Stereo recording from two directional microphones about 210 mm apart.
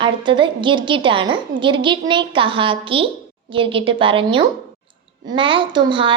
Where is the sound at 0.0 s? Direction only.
25° right (ahead or behind).